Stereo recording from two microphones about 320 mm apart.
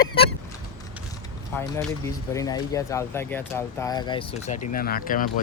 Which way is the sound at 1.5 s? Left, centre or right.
Centre.